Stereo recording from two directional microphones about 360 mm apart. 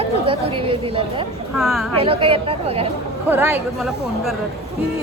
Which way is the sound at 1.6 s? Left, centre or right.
Centre.